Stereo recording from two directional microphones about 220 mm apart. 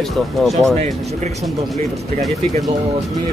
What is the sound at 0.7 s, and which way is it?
Speech, 35° right (ahead or behind).